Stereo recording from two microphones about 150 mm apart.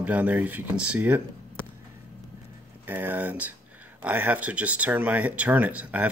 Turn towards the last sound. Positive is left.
turn(degrees=-10)  # may be behind; listen again after turning